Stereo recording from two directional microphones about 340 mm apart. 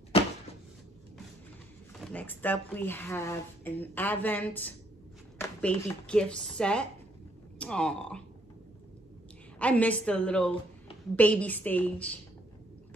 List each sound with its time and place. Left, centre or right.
2.0 s speech: centre
9.6 s speech: centre